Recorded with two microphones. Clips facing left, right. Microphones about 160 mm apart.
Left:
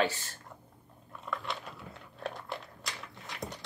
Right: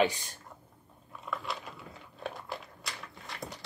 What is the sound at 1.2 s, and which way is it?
Biting, centre (ahead or behind).